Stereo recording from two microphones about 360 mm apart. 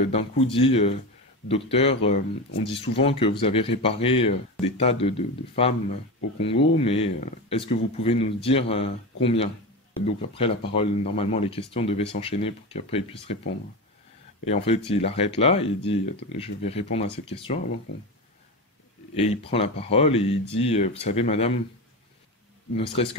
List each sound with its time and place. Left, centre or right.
0.1 s speech: centre
14.4 s speech: centre
19.1 s speech: centre
23.0 s speech: centre